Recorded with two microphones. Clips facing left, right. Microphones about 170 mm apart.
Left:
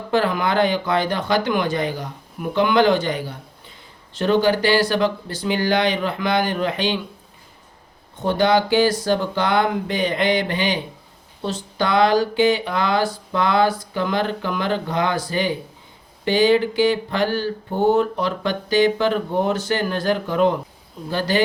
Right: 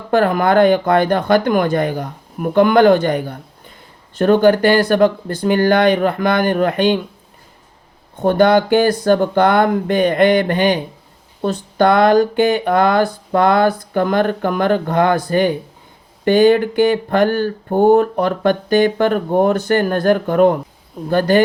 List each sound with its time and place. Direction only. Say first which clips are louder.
0.1 s speech: right 6 dB; 50° right (ahead or behind)
8.2 s speech: right 5 dB; 55° right (ahead or behind)